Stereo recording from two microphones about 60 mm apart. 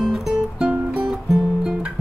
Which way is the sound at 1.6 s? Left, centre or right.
Centre.